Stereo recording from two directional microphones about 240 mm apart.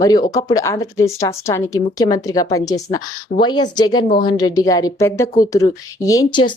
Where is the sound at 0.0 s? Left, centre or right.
Centre.